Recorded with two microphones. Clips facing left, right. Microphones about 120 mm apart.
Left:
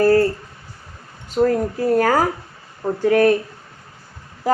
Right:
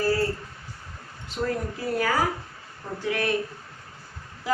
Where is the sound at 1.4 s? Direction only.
45° left (ahead or behind).